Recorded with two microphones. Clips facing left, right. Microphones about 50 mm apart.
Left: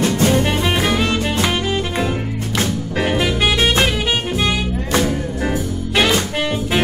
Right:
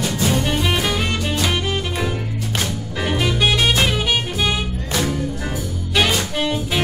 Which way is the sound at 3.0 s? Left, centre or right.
Centre.